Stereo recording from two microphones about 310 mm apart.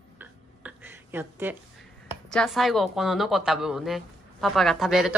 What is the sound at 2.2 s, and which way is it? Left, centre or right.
A woman's voice, centre.